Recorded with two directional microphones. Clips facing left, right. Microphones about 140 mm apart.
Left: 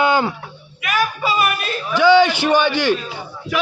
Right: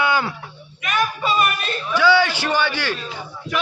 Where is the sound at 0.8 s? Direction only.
5° left (ahead or behind).